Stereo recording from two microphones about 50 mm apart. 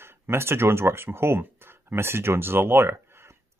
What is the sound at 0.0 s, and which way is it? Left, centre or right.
Speech, right.